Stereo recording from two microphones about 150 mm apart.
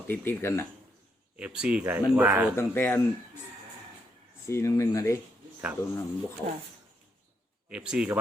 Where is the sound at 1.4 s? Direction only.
5° right (ahead or behind).